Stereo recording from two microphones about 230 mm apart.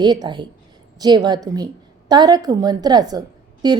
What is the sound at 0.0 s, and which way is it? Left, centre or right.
A woman's voice, centre.